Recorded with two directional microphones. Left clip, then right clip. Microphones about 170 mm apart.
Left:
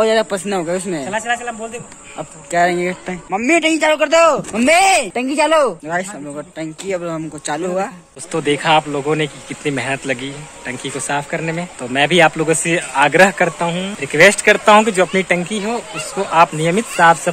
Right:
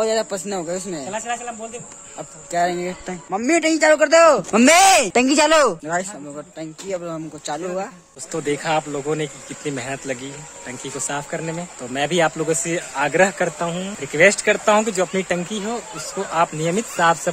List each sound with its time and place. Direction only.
0.0 s speech: centre (ahead or behind)
1.0 s speech: 5° right (ahead or behind)
3.3 s a man's voice: 30° right (ahead or behind)
4.2 s speech: 70° right (ahead or behind)
6.3 s speech: 5° right (ahead or behind)
13.6 s speech: 20° right (ahead or behind)